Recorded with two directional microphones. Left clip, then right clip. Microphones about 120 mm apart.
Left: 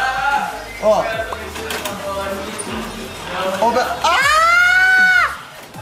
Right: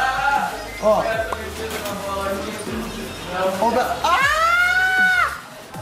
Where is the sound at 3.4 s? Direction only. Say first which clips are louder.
Left 3 dB; 30° right (ahead or behind).